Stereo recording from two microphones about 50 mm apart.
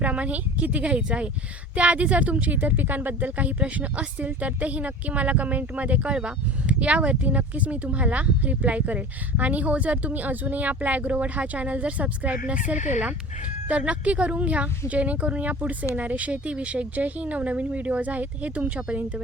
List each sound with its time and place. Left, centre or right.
0.0 s speech: right